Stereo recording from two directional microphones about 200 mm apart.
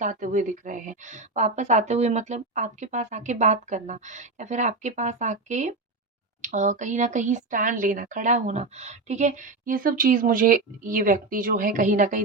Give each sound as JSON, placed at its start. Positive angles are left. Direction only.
{"t": 0.0, "sound": "speech", "side_deg": -40}